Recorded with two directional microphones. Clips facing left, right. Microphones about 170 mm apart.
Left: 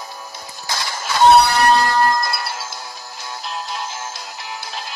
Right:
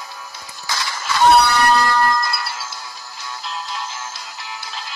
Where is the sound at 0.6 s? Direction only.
50° left (ahead or behind).